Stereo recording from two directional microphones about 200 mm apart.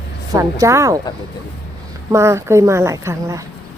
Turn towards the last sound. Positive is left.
turn(degrees=-15)  # may be behind; listen again after turning